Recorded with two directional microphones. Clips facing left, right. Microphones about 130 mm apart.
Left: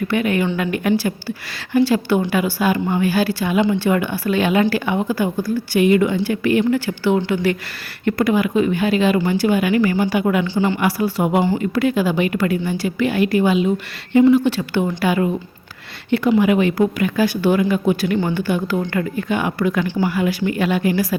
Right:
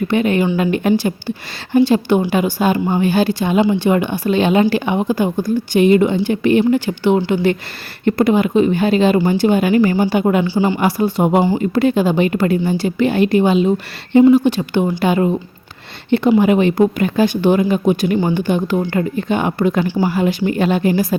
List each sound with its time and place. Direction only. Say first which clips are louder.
0.1 s a woman's voice: right 4 dB; 25° right (ahead or behind)